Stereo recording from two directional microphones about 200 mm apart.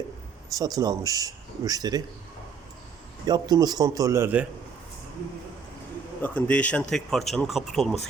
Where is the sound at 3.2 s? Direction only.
20° right (ahead or behind).